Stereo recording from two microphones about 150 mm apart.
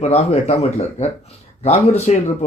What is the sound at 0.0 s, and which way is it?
Speech, 50° left (ahead or behind).